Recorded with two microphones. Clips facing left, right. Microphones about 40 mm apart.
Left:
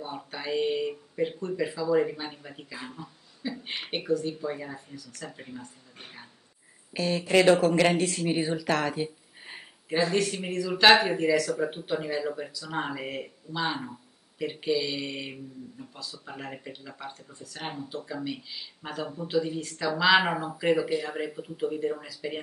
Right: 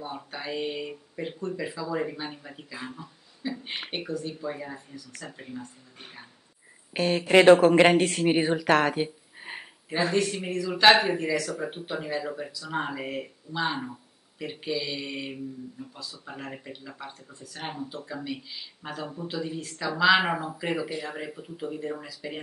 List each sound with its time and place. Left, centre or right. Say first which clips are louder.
0.0 s speech: even; centre
6.9 s speech: right 3 dB; right
9.4 s a sound: right 5 dB; centre
10.1 s speech: right 1 dB; centre